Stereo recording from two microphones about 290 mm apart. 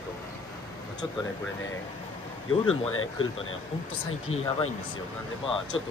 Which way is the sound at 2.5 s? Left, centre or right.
Left.